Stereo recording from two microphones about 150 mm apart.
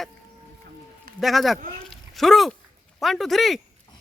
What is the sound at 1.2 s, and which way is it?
Speech, centre (ahead or behind).